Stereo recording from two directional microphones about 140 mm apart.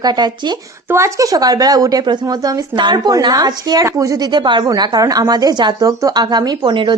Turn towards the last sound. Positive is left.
turn(degrees=-35)  # may be behind; listen again after turning